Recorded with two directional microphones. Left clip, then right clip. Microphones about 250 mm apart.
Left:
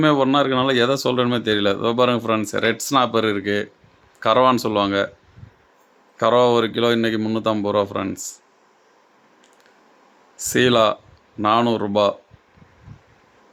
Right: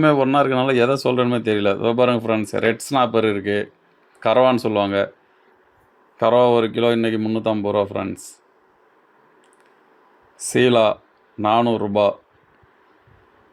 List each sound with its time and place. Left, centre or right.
0.0 s speech: centre
6.1 s speech: centre
10.4 s speech: centre